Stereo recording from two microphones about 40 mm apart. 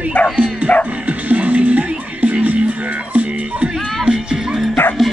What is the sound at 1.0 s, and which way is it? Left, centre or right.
Music, right.